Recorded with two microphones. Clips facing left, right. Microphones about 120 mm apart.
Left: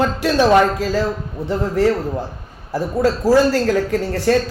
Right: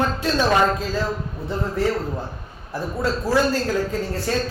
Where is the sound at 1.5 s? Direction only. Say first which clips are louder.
Left 6 dB; 75° left (ahead or behind).